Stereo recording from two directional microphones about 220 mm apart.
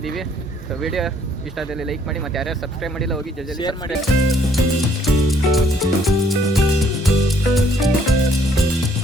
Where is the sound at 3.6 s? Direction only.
20° left (ahead or behind).